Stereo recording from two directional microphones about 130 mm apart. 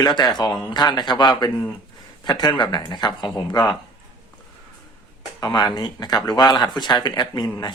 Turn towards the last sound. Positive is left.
turn(degrees=35)  # may be behind; listen again after turning